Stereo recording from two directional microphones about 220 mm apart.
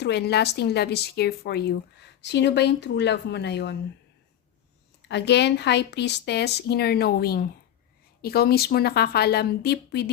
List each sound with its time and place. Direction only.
0.0 s speech: 50° left (ahead or behind)
5.0 s speech: 50° left (ahead or behind)